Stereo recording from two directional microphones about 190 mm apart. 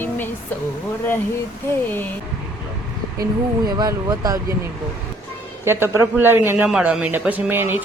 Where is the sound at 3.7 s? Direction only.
20° right (ahead or behind).